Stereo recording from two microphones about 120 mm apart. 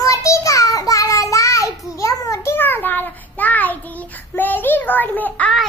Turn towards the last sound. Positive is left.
turn(degrees=10)  # may be behind; listen again after turning